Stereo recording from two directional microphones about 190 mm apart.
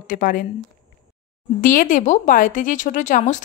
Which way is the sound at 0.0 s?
45° left (ahead or behind).